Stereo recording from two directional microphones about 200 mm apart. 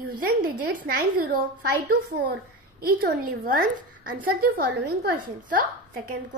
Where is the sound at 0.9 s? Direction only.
45° right (ahead or behind).